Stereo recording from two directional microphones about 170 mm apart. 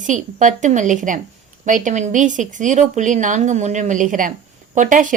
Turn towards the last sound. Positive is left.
turn(degrees=-50)  # may be behind; listen again after turning